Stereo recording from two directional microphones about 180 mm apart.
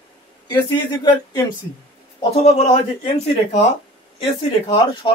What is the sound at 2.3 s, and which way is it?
Speech, 35° left (ahead or behind).